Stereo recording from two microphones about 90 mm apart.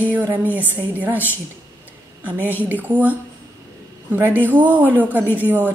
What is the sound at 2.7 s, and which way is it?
A woman's voice, 20° right (ahead or behind).